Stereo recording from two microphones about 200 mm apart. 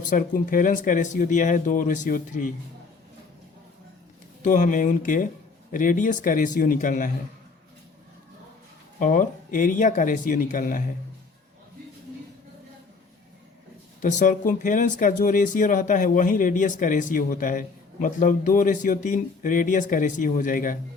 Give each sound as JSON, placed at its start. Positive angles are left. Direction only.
{"t": 0.0, "sound": "speech", "side_deg": 40}
{"t": 4.4, "sound": "speech", "side_deg": 40}
{"t": 9.0, "sound": "speech", "side_deg": 40}
{"t": 14.0, "sound": "speech", "side_deg": 40}